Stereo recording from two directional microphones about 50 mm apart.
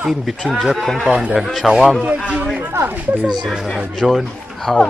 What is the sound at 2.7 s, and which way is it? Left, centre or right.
Speech, right.